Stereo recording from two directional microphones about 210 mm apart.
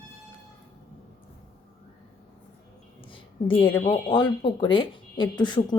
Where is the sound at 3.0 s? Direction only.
25° left (ahead or behind).